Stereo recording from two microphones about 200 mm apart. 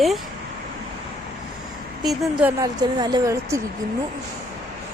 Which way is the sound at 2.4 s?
10° right (ahead or behind).